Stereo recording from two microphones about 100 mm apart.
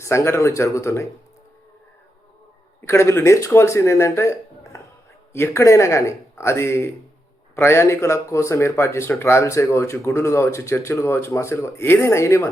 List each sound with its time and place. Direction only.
0.0 s speech: 30° left (ahead or behind)
2.8 s speech: 30° left (ahead or behind)